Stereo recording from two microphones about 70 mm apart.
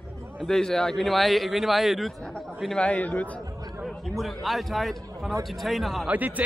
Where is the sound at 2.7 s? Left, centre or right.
Centre.